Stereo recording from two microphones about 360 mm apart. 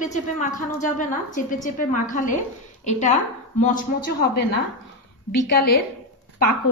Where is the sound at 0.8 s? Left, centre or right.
Left.